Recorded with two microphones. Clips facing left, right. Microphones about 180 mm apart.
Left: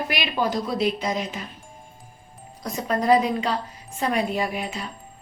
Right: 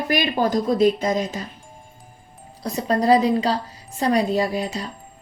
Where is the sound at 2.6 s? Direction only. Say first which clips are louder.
Right 4 dB; 35° right (ahead or behind).